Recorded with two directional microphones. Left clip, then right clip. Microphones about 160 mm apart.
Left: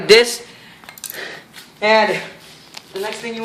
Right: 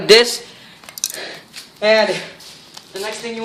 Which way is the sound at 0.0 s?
45° right (ahead or behind).